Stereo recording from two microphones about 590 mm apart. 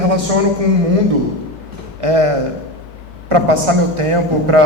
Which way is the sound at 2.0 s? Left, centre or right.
Right.